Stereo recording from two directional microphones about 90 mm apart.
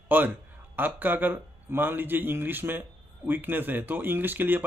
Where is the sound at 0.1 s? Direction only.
20° right (ahead or behind).